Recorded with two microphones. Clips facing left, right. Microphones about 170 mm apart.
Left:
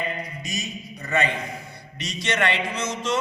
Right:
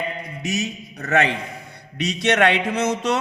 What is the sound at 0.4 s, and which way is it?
A man's voice, 70° right (ahead or behind).